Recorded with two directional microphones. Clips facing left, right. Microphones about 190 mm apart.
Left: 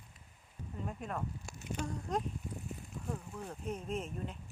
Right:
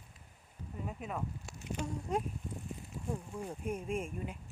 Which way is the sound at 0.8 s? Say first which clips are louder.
Even; 5° right (ahead or behind).